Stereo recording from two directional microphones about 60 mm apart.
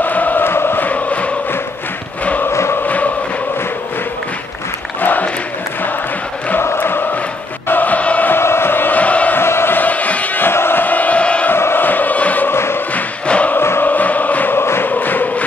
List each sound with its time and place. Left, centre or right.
0.0 s chant: left
5.0 s crowd: left
6.6 s chant: left
7.6 s music: left
8.3 s crowd: left
9.4 s a sound: left
9.8 s music: left
10.5 s chant: left
11.5 s a sound: left
12.4 s music: left
12.9 s choir: left
13.6 s music: left
13.8 s choir: left
14.9 s music: left